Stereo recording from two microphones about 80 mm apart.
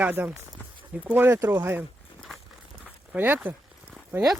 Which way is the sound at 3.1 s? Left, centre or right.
Right.